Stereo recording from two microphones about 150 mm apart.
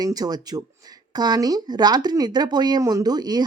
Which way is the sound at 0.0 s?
25° right (ahead or behind).